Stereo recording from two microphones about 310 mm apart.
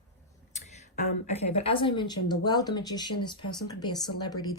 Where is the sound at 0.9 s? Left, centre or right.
Left.